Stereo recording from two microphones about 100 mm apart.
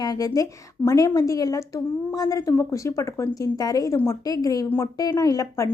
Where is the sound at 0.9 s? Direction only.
35° left (ahead or behind).